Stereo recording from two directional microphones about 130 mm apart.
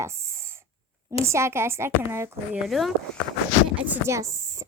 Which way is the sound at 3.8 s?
10° right (ahead or behind).